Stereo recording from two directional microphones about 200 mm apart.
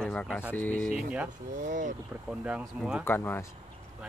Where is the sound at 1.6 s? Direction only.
40° right (ahead or behind).